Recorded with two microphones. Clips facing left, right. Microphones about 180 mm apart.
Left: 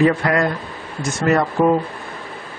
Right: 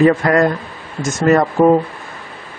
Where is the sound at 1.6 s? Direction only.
35° right (ahead or behind).